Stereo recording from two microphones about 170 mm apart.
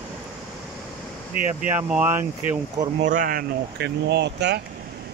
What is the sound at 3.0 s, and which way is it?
Speech, 50° right (ahead or behind).